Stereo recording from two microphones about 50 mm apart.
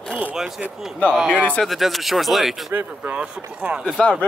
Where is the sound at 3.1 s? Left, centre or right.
Right.